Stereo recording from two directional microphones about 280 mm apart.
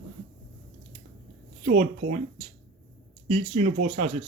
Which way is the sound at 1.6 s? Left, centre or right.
Right.